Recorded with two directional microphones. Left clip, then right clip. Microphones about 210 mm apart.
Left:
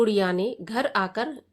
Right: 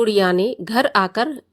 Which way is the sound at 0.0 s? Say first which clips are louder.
Right 6 dB; 35° right (ahead or behind).